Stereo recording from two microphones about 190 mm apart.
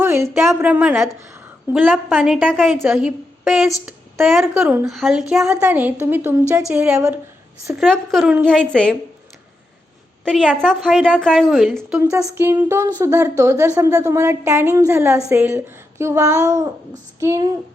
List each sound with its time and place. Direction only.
0.0 s a woman's voice: 10° right (ahead or behind)
7.8 s a woman's voice: centre (ahead or behind)
10.2 s a woman's voice: 5° left (ahead or behind)
12.3 s speech: 15° right (ahead or behind)